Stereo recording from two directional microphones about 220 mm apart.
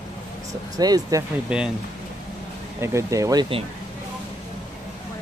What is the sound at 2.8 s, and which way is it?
Speech, 15° right (ahead or behind).